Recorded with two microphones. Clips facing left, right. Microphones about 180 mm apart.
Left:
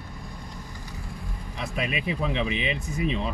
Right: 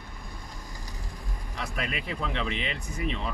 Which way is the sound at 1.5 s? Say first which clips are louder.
Left 4 dB; 15° left (ahead or behind).